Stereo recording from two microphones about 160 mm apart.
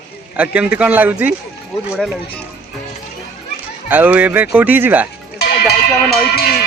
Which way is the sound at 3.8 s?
10° right (ahead or behind).